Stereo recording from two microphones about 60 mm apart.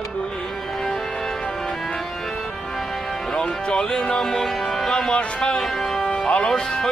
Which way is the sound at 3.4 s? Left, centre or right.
Centre.